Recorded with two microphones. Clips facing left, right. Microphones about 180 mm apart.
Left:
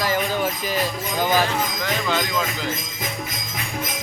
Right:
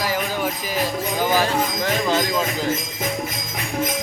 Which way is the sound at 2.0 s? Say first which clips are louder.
Right 2 dB; 35° right (ahead or behind).